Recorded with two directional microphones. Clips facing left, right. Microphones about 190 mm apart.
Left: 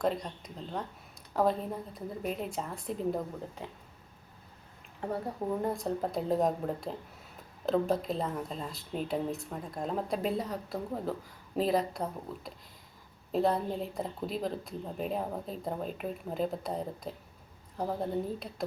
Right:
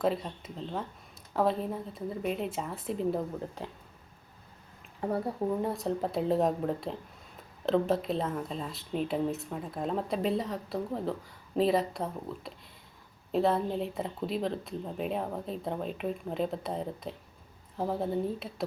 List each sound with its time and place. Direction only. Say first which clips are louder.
0.0 s a woman's voice: right 2 dB; 5° right (ahead or behind)
5.6 s a woman's voice: right 1 dB; centre (ahead or behind)